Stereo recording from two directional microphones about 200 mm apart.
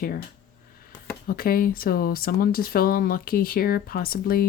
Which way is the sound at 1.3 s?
45° left (ahead or behind).